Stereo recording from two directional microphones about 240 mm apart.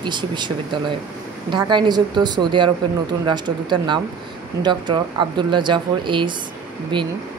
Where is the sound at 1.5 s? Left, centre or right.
Centre.